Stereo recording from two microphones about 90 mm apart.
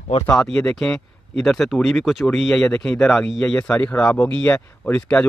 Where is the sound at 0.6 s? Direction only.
5° left (ahead or behind).